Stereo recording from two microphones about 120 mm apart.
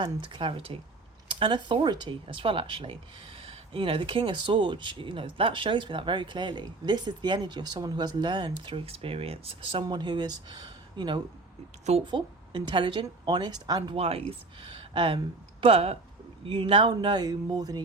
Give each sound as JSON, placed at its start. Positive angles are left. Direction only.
{"t": 0.0, "sound": "speech", "side_deg": -40}
{"t": 9.8, "sound": "speech", "side_deg": -40}
{"t": 13.9, "sound": "speech", "side_deg": -55}
{"t": 15.6, "sound": "speech", "side_deg": -55}
{"t": 16.5, "sound": "speech", "side_deg": -45}